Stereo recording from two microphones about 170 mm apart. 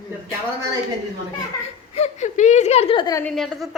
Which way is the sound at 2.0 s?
45° left (ahead or behind).